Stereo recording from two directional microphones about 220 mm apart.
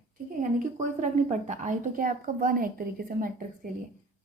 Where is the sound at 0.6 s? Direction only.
35° right (ahead or behind).